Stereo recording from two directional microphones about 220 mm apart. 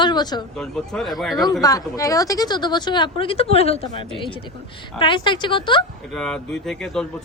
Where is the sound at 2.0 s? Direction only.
15° left (ahead or behind).